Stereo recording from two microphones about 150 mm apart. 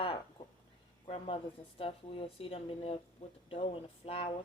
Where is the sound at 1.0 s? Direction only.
40° left (ahead or behind).